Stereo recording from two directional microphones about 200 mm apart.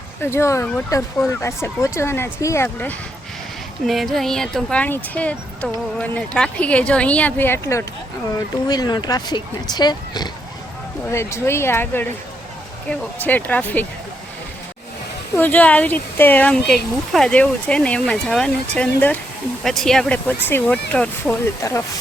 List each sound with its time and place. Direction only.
0.2 s speech: 10° left (ahead or behind)
3.8 s speech: centre (ahead or behind)
15.4 s speech: 10° left (ahead or behind)